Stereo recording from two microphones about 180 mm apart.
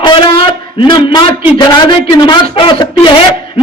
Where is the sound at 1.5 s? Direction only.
25° left (ahead or behind).